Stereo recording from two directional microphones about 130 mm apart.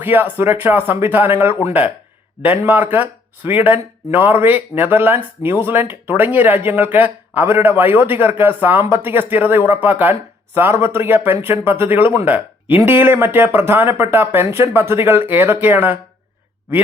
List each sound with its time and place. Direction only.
0.0 s speech: 15° right (ahead or behind)